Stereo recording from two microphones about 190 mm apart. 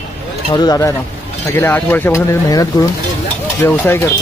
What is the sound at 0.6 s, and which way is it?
Speech, 20° left (ahead or behind).